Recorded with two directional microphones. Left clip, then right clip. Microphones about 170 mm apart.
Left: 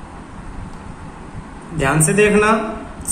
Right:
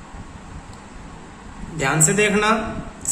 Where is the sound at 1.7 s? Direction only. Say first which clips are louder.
Left 3 dB; 25° right (ahead or behind).